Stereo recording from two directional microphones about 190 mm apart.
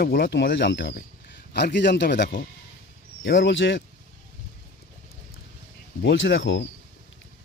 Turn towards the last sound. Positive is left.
turn(degrees=70)  # may be behind; listen again after turning